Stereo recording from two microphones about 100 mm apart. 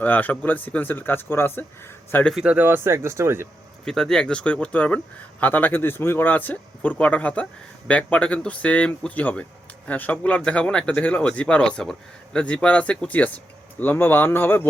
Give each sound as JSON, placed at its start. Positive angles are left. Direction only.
{"t": 0.0, "sound": "speech", "side_deg": 15}
{"t": 2.4, "sound": "speech", "side_deg": -15}
{"t": 3.8, "sound": "speech", "side_deg": 5}